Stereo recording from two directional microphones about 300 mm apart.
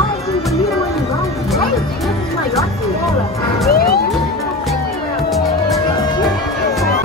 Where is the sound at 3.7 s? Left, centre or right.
Left.